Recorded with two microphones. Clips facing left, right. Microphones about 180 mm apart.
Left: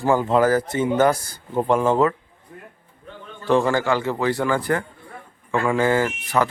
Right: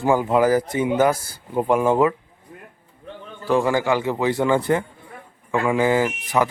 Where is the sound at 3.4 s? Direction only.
10° right (ahead or behind).